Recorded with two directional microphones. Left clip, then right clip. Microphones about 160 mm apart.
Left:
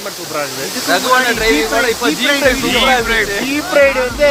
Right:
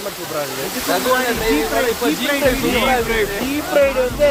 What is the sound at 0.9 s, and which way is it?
Speech, 30° left (ahead or behind).